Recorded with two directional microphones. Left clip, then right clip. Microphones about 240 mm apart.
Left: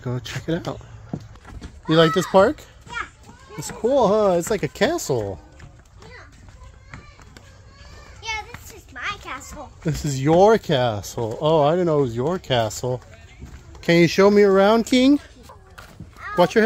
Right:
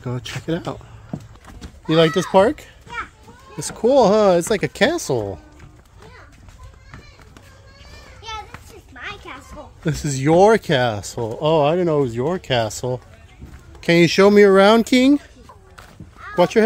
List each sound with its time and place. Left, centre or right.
0.0 s speech: centre
3.5 s speech: right
8.2 s children playing: centre
9.0 s music: left
9.8 s speech: centre
16.3 s speech: centre